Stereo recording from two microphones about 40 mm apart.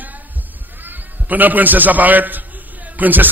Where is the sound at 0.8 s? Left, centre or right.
Right.